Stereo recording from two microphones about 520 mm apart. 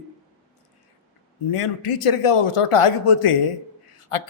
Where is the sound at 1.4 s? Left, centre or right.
Left.